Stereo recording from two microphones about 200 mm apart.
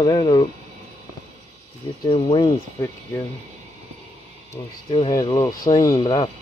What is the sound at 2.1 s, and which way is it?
Speech, 25° left (ahead or behind).